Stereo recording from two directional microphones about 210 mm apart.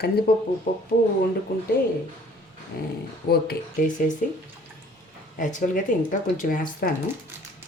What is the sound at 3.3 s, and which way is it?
Speech, 45° left (ahead or behind).